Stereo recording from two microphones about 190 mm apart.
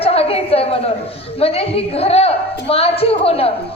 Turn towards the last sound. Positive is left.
turn(degrees=30)  # may be behind; listen again after turning